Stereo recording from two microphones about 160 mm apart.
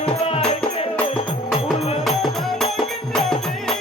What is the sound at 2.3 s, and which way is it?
Music, centre (ahead or behind).